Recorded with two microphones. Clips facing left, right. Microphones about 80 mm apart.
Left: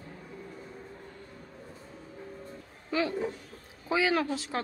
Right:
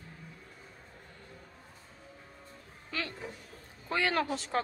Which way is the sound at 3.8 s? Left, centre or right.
Centre.